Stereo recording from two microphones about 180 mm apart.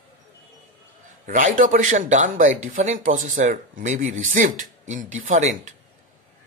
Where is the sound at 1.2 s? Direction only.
50° right (ahead or behind).